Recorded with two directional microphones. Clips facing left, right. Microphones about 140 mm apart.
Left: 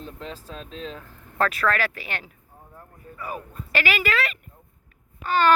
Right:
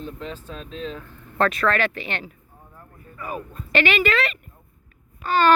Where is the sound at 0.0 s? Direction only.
35° left (ahead or behind).